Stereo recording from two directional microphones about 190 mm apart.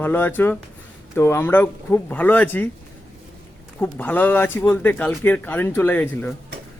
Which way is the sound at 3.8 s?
10° left (ahead or behind).